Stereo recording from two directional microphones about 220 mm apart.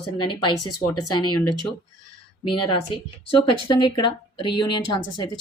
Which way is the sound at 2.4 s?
20° left (ahead or behind).